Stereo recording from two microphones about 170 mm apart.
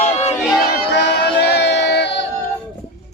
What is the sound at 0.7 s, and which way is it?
Music, 75° left (ahead or behind).